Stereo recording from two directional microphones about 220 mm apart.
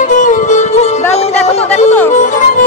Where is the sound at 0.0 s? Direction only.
35° left (ahead or behind).